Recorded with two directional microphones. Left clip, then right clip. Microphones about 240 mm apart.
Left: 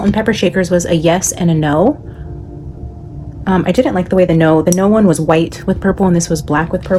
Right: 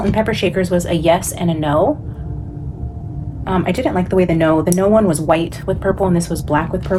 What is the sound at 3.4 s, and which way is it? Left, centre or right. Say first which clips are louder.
Speech: left 5 dB; left.